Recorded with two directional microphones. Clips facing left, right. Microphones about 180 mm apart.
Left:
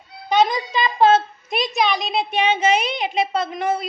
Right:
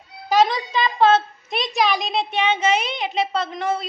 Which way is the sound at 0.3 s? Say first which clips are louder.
Even; centre (ahead or behind).